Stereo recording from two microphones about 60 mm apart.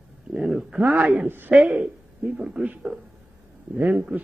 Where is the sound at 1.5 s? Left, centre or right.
Centre.